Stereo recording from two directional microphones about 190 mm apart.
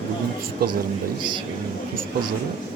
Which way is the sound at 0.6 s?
55° right (ahead or behind).